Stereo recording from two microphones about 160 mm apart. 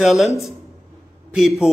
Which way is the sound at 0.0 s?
Centre (ahead or behind).